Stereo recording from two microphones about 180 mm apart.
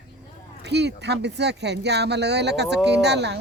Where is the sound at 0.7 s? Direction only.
70° right (ahead or behind).